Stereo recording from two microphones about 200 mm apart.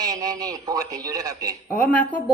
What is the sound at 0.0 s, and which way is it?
A man's voice, 20° right (ahead or behind).